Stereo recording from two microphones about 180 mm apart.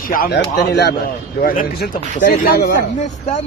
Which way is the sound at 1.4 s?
55° left (ahead or behind).